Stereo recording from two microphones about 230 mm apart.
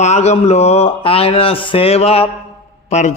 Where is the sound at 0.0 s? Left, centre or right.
Left.